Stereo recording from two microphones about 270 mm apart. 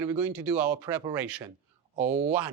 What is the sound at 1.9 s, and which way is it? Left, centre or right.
Speech, right.